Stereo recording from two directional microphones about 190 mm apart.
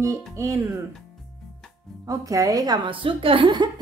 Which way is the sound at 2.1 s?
15° right (ahead or behind).